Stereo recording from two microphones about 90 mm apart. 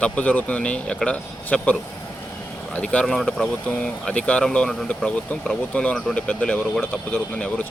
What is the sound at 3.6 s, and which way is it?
Speech, 15° left (ahead or behind).